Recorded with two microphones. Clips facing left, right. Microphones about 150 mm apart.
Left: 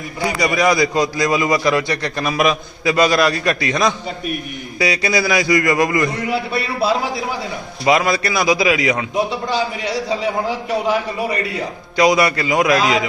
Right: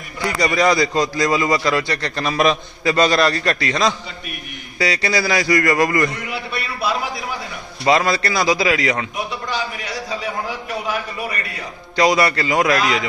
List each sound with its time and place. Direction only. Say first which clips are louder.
0.3 s a man's voice: even; 10° left (ahead or behind)
6.3 s a man's voice: left 6 dB; 30° left (ahead or behind)
7.9 s a man's voice: left 1 dB; 15° left (ahead or behind)
9.1 s a man's voice: left 6 dB; 30° left (ahead or behind)
11.9 s a man's voice: left 2 dB; 15° left (ahead or behind)